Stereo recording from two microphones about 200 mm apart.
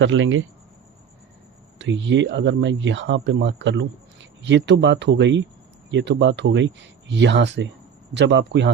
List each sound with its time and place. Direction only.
0.0 s speech: 75° right (ahead or behind)
1.8 s speech: 65° right (ahead or behind)